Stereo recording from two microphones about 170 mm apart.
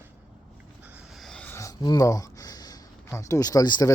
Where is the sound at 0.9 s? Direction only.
Centre (ahead or behind).